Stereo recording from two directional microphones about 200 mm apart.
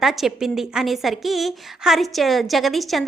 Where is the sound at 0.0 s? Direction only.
Centre (ahead or behind).